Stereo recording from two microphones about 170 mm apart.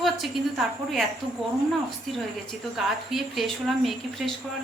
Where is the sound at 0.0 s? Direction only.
Centre (ahead or behind).